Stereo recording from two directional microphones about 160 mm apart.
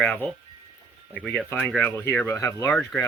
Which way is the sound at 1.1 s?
10° left (ahead or behind).